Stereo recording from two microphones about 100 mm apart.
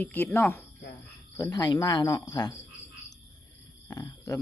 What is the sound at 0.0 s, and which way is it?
Speech, 20° left (ahead or behind).